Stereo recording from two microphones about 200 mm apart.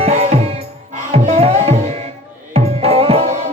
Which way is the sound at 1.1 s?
30° right (ahead or behind).